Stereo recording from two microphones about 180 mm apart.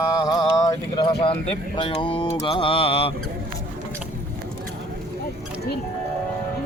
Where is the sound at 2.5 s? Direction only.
30° left (ahead or behind).